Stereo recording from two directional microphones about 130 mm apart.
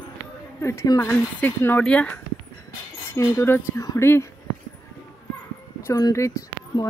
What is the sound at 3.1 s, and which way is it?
Speech, 20° left (ahead or behind).